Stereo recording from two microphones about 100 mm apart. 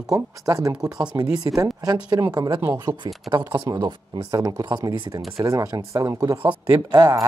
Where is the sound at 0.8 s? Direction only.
10° right (ahead or behind).